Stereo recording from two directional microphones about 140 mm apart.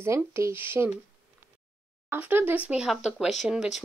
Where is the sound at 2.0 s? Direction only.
15° right (ahead or behind).